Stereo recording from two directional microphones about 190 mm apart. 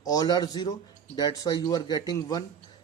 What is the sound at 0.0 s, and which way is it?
Speech, 20° left (ahead or behind).